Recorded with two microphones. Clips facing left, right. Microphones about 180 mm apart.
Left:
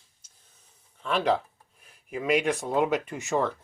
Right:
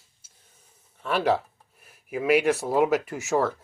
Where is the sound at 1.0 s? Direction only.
5° right (ahead or behind).